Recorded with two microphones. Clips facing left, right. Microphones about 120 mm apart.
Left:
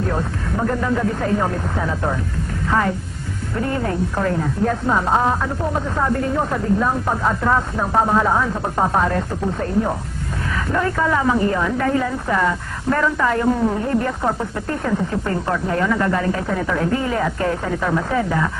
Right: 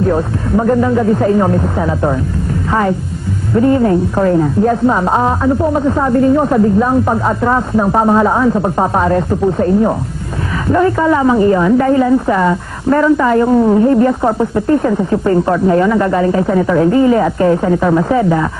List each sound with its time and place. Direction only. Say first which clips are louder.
0.1 s a woman's voice: right 9 dB; 20° right (ahead or behind)
3.5 s a woman's voice: right 12 dB; 15° right (ahead or behind)
10.7 s a woman's voice: right 9 dB; 20° right (ahead or behind)